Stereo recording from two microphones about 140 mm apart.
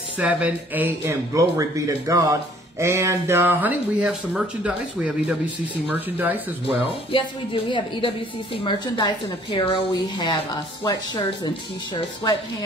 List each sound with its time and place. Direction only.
0.2 s speech: 10° right (ahead or behind)
7.1 s a woman's voice: 40° left (ahead or behind)